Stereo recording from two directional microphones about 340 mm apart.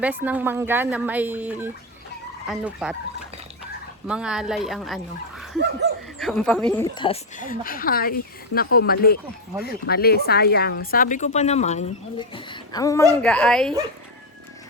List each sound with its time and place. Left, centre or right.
0.0 s speech: centre
4.0 s speech: centre
5.5 s laughter: right
6.1 s speech: centre